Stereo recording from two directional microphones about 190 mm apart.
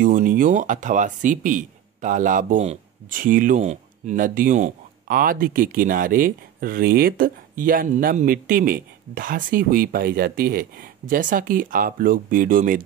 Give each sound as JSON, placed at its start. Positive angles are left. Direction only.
{"t": 0.0, "sound": "speech", "side_deg": -45}